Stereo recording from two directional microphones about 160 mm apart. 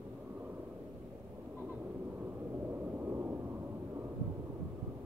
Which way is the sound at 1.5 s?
10° right (ahead or behind).